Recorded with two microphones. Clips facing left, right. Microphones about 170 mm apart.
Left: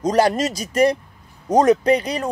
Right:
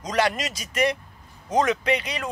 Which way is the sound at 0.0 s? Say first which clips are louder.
Left 7 dB; 35° left (ahead or behind).